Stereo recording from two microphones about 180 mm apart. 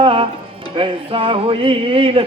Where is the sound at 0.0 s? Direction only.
30° right (ahead or behind).